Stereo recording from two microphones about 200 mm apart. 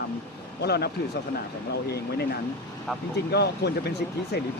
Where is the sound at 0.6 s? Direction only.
55° left (ahead or behind).